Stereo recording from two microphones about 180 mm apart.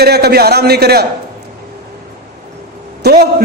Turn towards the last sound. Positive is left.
turn(degrees=-60)  # may be behind; listen again after turning